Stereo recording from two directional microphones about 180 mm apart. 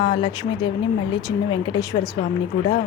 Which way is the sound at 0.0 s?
25° left (ahead or behind).